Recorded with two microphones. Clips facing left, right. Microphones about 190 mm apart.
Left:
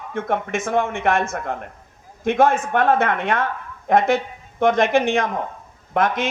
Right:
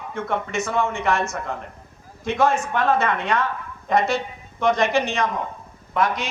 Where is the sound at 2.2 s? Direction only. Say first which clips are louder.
Left 3 dB; 55° left (ahead or behind).